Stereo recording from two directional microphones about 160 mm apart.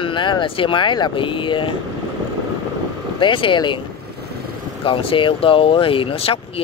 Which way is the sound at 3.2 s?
30° left (ahead or behind).